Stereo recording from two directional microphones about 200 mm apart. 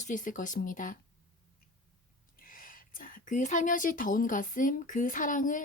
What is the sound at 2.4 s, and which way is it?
Speech, 45° left (ahead or behind).